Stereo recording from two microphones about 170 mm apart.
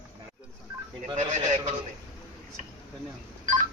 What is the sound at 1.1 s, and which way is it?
Speech, 40° right (ahead or behind).